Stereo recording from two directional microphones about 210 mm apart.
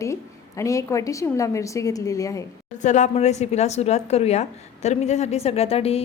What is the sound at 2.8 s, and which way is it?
Speech, 35° left (ahead or behind).